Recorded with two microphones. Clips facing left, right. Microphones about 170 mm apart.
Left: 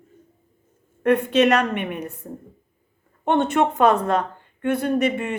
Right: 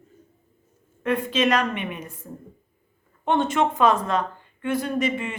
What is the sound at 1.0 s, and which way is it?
A woman's voice, 65° left (ahead or behind).